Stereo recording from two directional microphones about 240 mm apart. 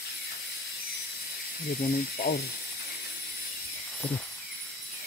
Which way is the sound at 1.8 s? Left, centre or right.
Left.